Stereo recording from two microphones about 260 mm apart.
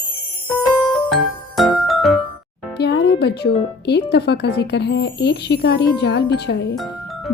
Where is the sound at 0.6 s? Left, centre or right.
Centre.